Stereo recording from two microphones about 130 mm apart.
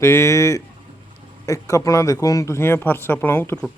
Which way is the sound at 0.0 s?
20° left (ahead or behind).